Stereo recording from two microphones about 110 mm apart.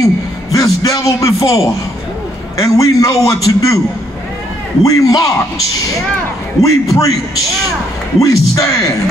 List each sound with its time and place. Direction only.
0.0 s a man's voice: 30° left (ahead or behind)
4.8 s a man's voice: 30° left (ahead or behind)
6.6 s a man's voice: 30° left (ahead or behind)
8.2 s a man's voice: 30° left (ahead or behind)